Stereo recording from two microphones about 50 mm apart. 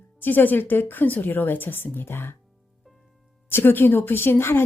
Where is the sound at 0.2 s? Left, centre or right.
Left.